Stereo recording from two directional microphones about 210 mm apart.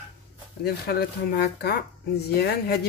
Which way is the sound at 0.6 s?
50° left (ahead or behind).